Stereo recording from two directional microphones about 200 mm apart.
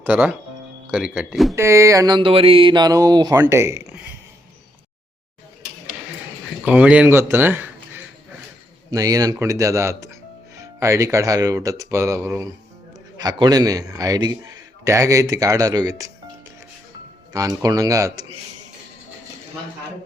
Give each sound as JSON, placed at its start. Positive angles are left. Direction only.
{"t": 0.0, "sound": "a man's voice", "side_deg": -10}
{"t": 1.5, "sound": "a man's voice", "side_deg": -15}
{"t": 6.7, "sound": "a man's voice", "side_deg": -5}
{"t": 17.3, "sound": "a man's voice", "side_deg": -15}